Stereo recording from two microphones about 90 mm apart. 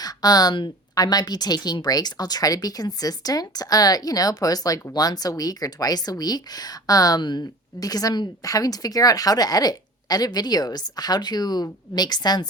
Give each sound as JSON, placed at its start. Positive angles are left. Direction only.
{"t": 0.0, "sound": "speech", "side_deg": 45}